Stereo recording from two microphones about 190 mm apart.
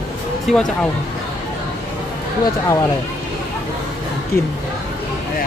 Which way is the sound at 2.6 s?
15° left (ahead or behind).